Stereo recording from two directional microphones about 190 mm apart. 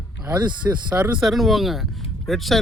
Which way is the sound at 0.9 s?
5° right (ahead or behind).